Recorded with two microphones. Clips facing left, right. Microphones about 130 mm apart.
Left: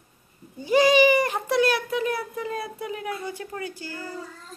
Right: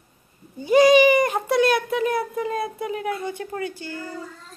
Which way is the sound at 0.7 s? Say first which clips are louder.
Right 4 dB; 20° right (ahead or behind).